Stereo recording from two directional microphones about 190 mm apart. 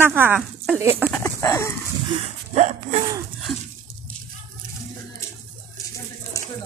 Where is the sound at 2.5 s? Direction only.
35° right (ahead or behind).